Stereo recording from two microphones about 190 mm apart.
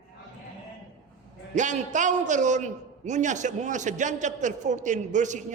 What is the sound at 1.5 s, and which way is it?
A man's voice, 40° right (ahead or behind).